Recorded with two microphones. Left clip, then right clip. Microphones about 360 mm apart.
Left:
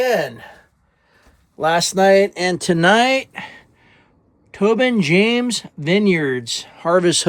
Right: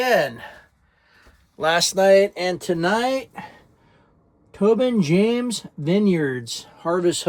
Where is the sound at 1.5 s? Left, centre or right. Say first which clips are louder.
Left 2 dB; centre.